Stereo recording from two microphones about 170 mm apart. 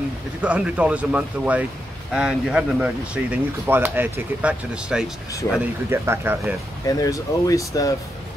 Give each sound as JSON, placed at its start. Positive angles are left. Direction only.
{"t": 0.4, "sound": "speech", "side_deg": -10}
{"t": 6.9, "sound": "speech", "side_deg": 20}